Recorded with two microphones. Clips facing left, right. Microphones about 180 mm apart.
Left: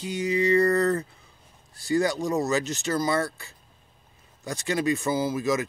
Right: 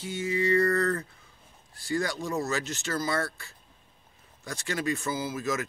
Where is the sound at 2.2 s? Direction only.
15° left (ahead or behind).